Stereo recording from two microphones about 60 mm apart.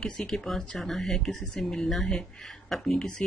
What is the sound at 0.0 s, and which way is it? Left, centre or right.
Speech, centre.